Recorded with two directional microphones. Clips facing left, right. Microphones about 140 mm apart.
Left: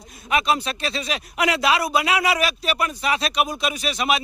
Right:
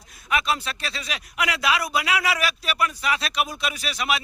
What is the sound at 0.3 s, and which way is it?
Speech, 20° left (ahead or behind).